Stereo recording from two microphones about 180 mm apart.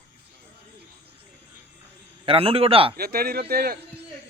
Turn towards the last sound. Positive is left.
turn(degrees=-55)  # may be behind; listen again after turning